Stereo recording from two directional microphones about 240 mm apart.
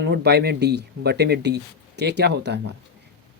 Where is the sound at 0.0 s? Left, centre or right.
Right.